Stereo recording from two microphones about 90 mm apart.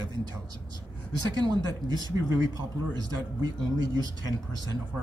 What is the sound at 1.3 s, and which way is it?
Speech, 50° right (ahead or behind).